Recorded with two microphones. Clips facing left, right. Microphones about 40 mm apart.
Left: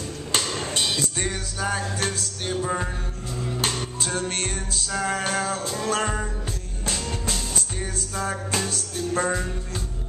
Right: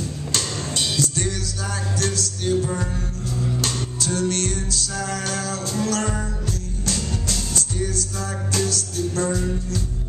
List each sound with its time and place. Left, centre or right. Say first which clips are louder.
0.3 s music: left 2 dB; left
3.3 s music: right 1 dB; centre